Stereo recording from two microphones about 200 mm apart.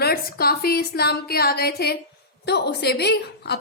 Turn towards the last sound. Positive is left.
turn(degrees=55)  # may be behind; listen again after turning